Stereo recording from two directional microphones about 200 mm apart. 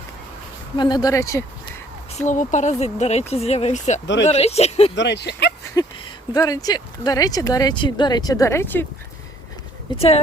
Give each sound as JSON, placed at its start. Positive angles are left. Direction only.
{"t": 0.8, "sound": "speech", "side_deg": 20}
{"t": 2.1, "sound": "speech", "side_deg": 40}
{"t": 4.0, "sound": "speech", "side_deg": 65}
{"t": 4.3, "sound": "speech", "side_deg": 30}
{"t": 4.9, "sound": "speech", "side_deg": 60}
{"t": 5.7, "sound": "speech", "side_deg": 20}
{"t": 9.9, "sound": "speech", "side_deg": 20}